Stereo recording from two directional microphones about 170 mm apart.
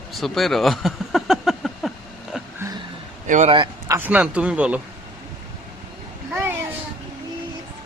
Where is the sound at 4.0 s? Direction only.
10° right (ahead or behind).